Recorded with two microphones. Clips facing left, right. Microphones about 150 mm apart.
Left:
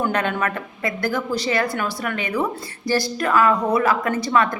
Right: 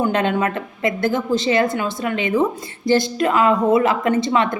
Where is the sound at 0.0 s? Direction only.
25° right (ahead or behind).